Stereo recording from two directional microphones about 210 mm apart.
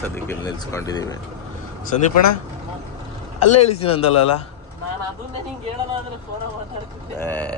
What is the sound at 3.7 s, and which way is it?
Speech, 25° left (ahead or behind).